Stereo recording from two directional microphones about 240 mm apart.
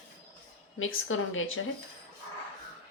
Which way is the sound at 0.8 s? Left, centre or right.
Left.